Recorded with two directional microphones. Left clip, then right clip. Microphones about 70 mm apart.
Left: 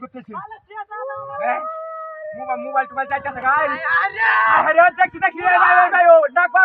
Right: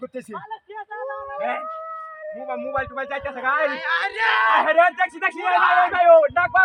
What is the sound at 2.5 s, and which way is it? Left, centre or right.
A man's voice, right.